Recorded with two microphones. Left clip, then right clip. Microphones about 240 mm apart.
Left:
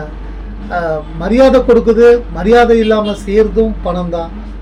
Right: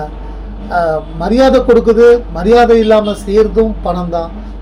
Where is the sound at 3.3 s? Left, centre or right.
Centre.